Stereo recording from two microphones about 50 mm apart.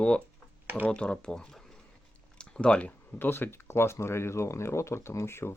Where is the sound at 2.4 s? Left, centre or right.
Centre.